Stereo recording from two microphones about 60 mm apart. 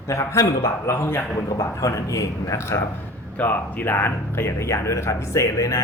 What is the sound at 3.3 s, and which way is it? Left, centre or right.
Speech, left.